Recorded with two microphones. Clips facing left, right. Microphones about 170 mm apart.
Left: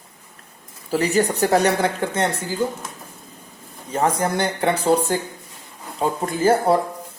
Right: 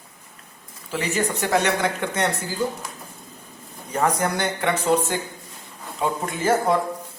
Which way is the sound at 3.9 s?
25° left (ahead or behind).